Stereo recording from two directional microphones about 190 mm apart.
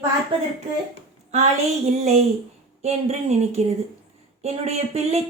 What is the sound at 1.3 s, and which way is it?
A woman's voice, 35° right (ahead or behind).